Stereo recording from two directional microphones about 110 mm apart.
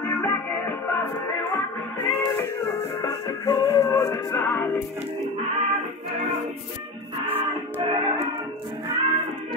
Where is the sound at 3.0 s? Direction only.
35° left (ahead or behind).